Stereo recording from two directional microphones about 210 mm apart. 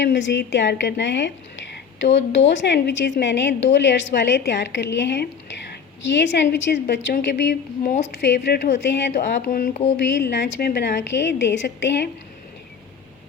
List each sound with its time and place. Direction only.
0.0 s a woman's voice: 55° left (ahead or behind)
9.1 s speech: 40° left (ahead or behind)
10.2 s a woman's voice: 55° left (ahead or behind)